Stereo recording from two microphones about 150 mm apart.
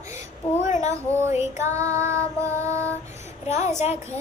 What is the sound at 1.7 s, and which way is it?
Child singing, 20° right (ahead or behind).